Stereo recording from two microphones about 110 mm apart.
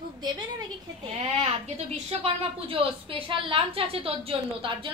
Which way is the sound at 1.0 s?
80° right.